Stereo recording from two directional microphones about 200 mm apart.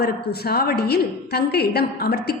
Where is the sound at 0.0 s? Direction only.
50° left (ahead or behind).